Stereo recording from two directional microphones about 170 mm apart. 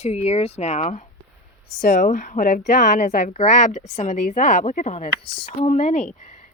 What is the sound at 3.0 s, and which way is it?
Speech, 45° left (ahead or behind).